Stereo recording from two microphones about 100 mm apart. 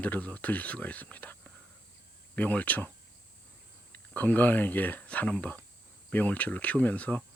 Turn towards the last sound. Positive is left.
turn(degrees=15)  # may be behind; listen again after turning